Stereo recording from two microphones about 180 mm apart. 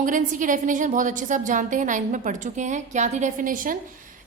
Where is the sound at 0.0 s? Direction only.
45° right (ahead or behind).